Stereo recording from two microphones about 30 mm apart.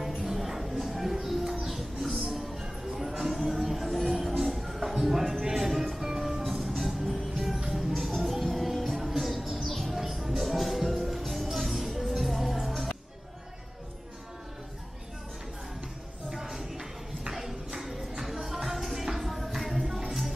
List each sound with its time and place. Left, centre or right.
0.2 s music: centre
1.4 s bird: centre
2.0 s music: centre
9.1 s a sound: centre
9.7 s music: centre
9.9 s music: centre
16.3 s music: centre